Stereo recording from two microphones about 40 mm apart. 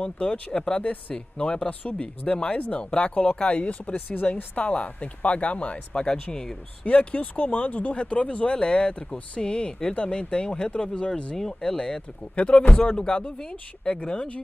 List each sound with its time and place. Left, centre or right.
0.0 s speech: left
2.0 s speech: left
4.1 s speech: left
5.9 s speech: left
6.9 s speech: left
8.5 s speech: centre